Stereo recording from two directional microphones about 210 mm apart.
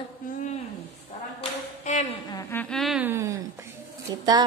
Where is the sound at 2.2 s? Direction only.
15° left (ahead or behind).